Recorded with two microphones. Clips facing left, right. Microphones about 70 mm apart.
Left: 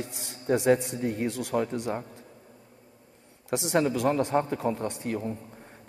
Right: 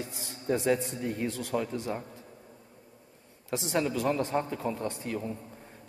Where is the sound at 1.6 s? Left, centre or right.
Left.